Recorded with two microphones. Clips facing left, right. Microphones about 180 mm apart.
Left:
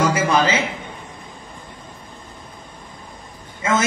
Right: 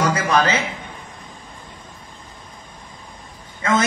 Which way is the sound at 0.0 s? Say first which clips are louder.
Left 1 dB; 25° left (ahead or behind).